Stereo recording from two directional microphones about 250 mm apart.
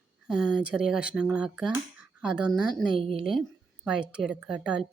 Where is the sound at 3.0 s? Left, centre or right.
Right.